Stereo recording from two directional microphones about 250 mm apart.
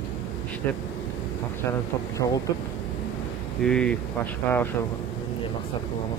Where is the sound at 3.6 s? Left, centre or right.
Centre.